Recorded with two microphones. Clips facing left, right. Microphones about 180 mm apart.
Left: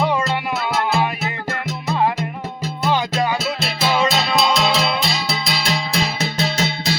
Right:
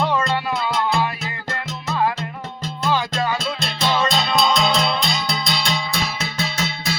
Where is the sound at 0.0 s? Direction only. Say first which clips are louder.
Left 1 dB; 10° left (ahead or behind).